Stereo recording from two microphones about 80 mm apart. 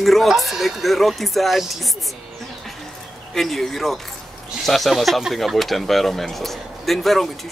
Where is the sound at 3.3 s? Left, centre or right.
Centre.